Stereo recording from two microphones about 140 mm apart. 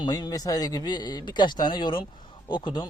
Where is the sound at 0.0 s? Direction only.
30° left (ahead or behind).